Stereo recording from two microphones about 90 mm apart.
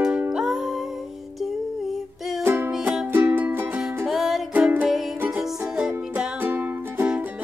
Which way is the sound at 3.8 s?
5° right (ahead or behind).